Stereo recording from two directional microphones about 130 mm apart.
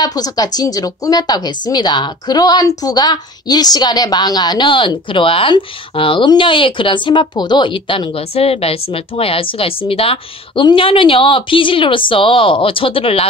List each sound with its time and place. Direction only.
0.0 s a woman's voice: 30° left (ahead or behind); by 13.3 s 45° left (ahead or behind)